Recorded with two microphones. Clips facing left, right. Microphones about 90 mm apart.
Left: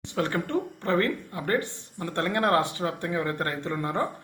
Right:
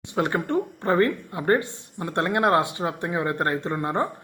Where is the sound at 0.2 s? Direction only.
20° right (ahead or behind).